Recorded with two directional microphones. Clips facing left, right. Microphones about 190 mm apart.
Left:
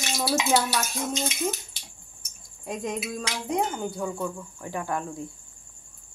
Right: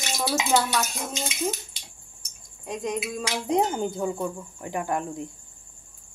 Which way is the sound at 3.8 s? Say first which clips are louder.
Right 3 dB; 20° right (ahead or behind).